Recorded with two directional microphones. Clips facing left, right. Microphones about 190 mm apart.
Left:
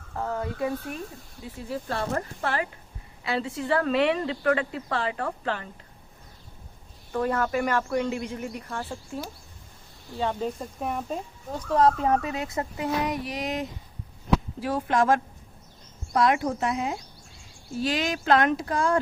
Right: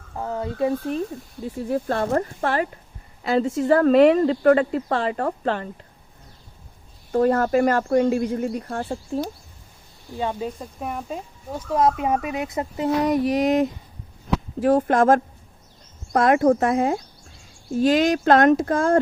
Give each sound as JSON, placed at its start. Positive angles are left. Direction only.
{"t": 0.2, "sound": "speech", "side_deg": -20}
{"t": 1.7, "sound": "speech", "side_deg": -50}
{"t": 7.1, "sound": "speech", "side_deg": -40}
{"t": 8.6, "sound": "speech", "side_deg": -40}
{"t": 10.2, "sound": "speech", "side_deg": -10}
{"t": 13.1, "sound": "speech", "side_deg": -45}